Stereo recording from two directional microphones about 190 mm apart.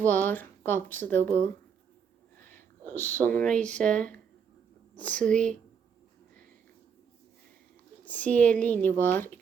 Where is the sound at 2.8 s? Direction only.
10° left (ahead or behind).